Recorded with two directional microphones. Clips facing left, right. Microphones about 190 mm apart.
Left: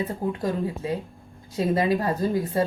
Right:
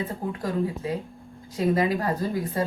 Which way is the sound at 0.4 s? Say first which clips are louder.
Right 2 dB; 25° left (ahead or behind).